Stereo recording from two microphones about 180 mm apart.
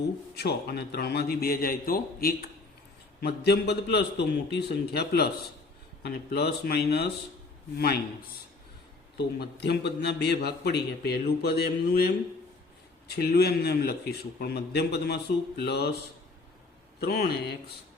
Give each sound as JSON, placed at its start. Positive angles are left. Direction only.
{"t": 0.3, "sound": "a man's voice", "side_deg": 65}
{"t": 9.1, "sound": "a man's voice", "side_deg": 65}
{"t": 17.0, "sound": "a man's voice", "side_deg": 60}